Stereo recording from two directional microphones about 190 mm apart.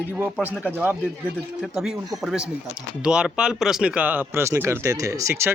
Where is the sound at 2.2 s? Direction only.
5° right (ahead or behind).